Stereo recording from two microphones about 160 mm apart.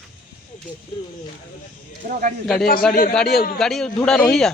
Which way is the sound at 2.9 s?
60° left (ahead or behind).